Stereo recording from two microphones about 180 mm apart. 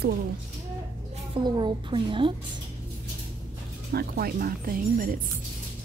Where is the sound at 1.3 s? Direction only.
25° right (ahead or behind).